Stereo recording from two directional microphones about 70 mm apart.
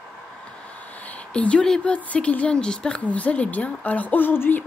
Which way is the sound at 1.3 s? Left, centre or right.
Centre.